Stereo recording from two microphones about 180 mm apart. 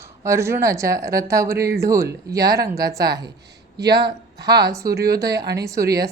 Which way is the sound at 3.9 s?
20° right (ahead or behind).